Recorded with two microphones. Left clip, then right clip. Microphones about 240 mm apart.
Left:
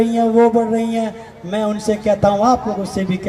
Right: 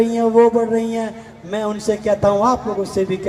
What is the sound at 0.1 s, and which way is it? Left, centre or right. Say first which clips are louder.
A man's voice: even; left.